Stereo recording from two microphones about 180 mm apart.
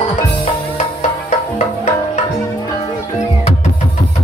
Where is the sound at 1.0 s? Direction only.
35° left (ahead or behind).